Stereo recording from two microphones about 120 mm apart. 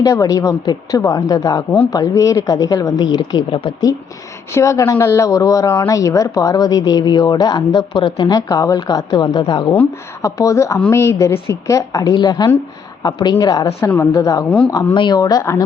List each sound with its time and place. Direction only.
0.0 s speech: 30° left (ahead or behind)
3.5 s speech: 50° left (ahead or behind)
4.5 s a woman's voice: 25° left (ahead or behind)
10.2 s a woman's voice: 25° left (ahead or behind)